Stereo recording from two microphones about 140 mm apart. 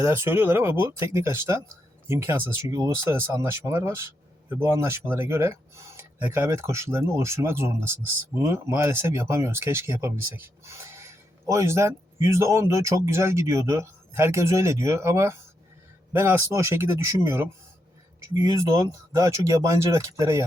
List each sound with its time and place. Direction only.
0.0 s speech: 20° right (ahead or behind)